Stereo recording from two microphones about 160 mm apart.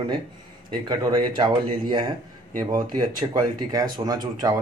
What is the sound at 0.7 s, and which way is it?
Speech, 25° right (ahead or behind).